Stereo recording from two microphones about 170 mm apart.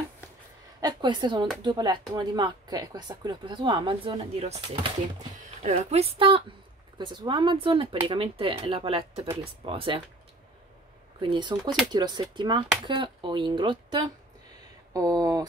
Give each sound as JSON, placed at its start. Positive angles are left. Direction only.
{"t": 0.7, "sound": "a woman's voice", "side_deg": -25}
{"t": 11.1, "sound": "speech", "side_deg": -30}